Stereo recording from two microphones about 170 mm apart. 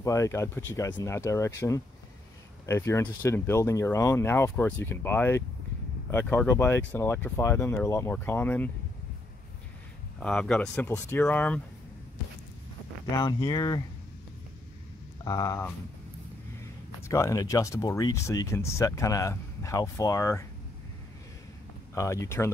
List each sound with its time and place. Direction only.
0.0 s speech: 20° left (ahead or behind)
10.2 s speech: 5° left (ahead or behind)
13.1 s speech: 25° left (ahead or behind)
15.2 s speech: 20° left (ahead or behind)
17.1 s speech: 20° left (ahead or behind)
21.9 s speech: 20° left (ahead or behind)